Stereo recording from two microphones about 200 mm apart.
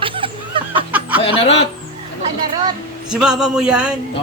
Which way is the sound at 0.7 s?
10° right (ahead or behind).